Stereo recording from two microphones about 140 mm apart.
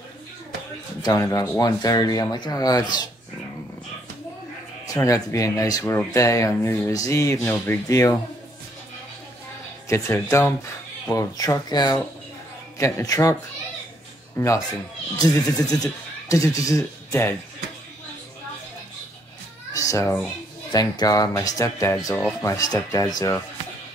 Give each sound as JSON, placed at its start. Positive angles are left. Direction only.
{"t": 1.0, "sound": "speech", "side_deg": 25}
{"t": 1.6, "sound": "speech", "side_deg": 25}
{"t": 4.8, "sound": "speech", "side_deg": 25}
{"t": 9.8, "sound": "speech", "side_deg": 20}
{"t": 19.7, "sound": "children playing", "side_deg": 25}
{"t": 20.7, "sound": "speech", "side_deg": 30}